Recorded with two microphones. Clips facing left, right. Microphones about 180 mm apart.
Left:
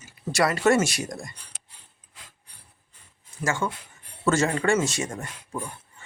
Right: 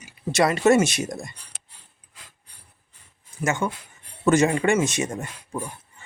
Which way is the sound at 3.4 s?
20° right (ahead or behind).